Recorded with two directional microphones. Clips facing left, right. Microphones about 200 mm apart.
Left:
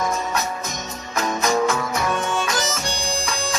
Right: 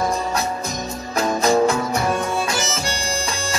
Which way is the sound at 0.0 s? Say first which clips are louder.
Right 2 dB; 35° right (ahead or behind).